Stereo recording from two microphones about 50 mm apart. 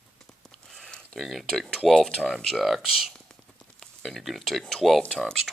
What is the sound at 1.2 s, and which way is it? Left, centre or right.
Speech, centre.